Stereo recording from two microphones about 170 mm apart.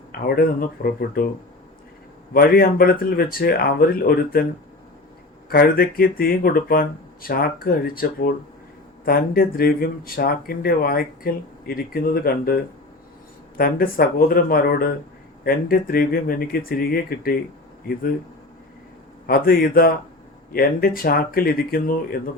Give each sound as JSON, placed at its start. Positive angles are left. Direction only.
{"t": 0.1, "sound": "speech", "side_deg": 65}
{"t": 2.3, "sound": "speech", "side_deg": 65}
{"t": 5.5, "sound": "speech", "side_deg": 60}
{"t": 13.6, "sound": "speech", "side_deg": 60}
{"t": 19.3, "sound": "speech", "side_deg": 60}